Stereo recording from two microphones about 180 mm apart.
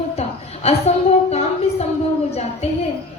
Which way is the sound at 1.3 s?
35° left (ahead or behind).